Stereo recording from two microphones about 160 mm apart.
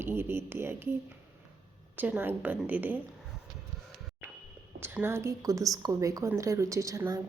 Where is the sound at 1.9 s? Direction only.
10° right (ahead or behind).